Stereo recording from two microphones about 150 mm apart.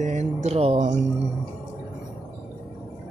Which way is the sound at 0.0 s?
50° right (ahead or behind).